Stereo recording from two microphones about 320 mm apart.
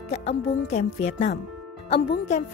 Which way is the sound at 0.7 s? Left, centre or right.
Left.